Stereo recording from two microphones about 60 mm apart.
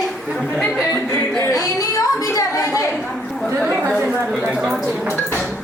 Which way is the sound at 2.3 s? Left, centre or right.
Left.